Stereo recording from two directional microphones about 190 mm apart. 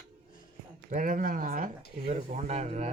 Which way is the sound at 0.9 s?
45° right (ahead or behind).